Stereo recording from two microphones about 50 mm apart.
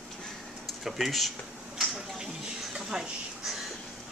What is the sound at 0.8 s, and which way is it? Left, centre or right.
Speech, centre.